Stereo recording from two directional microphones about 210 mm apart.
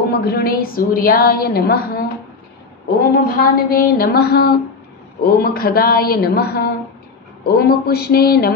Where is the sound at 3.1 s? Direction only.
45° left (ahead or behind).